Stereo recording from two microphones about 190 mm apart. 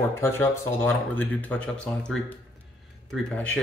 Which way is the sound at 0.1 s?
15° left (ahead or behind).